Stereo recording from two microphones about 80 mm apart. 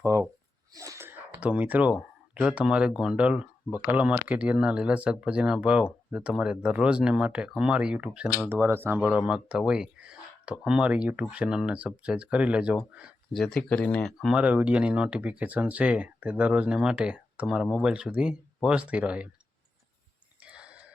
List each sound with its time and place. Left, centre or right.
0.0 s a sound: right
0.7 s sneeze: right
1.4 s speech: centre
8.4 s speech: right
9.0 s speech: centre
13.3 s speech: centre
13.6 s speech: centre
14.2 s speech: centre
14.4 s speech: centre
20.4 s a sound: centre